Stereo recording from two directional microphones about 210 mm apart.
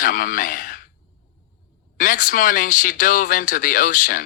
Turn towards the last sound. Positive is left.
turn(degrees=40)  # may be behind; listen again after turning